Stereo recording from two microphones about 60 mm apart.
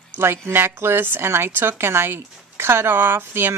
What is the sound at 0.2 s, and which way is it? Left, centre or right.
Speech, right.